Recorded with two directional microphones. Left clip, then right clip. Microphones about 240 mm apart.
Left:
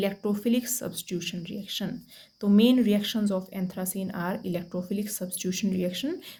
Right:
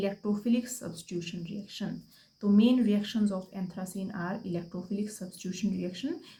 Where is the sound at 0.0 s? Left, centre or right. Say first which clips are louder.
Left 4 dB; left.